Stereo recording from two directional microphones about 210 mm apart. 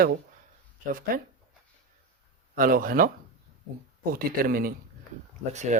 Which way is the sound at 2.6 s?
40° right (ahead or behind).